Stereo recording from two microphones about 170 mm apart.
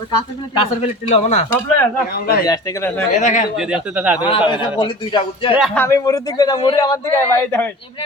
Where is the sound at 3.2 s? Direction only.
45° left (ahead or behind).